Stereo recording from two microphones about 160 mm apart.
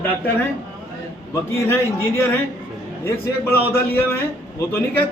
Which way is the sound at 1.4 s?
15° left (ahead or behind).